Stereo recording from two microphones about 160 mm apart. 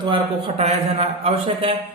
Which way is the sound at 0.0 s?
35° right (ahead or behind).